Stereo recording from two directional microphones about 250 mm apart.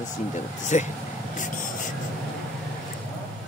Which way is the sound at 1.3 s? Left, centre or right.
Left.